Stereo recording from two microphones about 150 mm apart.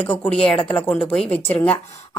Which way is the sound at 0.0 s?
10° left (ahead or behind).